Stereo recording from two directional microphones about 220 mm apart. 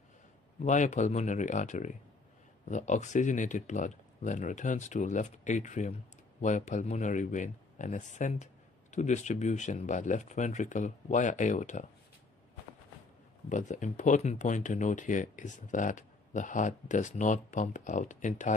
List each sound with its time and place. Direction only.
0.7 s speech: 35° left (ahead or behind)
13.5 s speech: 35° left (ahead or behind)